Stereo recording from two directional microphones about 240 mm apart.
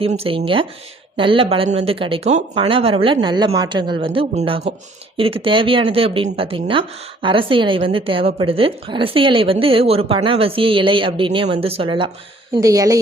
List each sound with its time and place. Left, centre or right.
0.0 s a woman's voice: right